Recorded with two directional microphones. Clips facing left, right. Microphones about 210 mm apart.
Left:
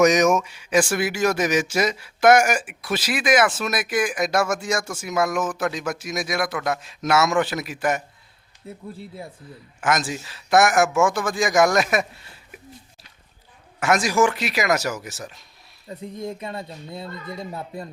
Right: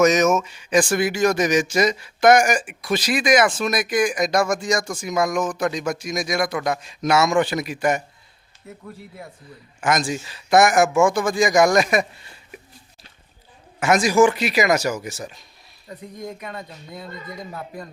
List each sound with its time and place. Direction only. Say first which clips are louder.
0.0 s speech: even; 15° left (ahead or behind)
8.6 s speech: left 2 dB; 30° left (ahead or behind)
9.4 s speech: right 1 dB; centre (ahead or behind)
13.7 s speech: right 3 dB; centre (ahead or behind)
15.9 s speech: left 3 dB; 25° left (ahead or behind)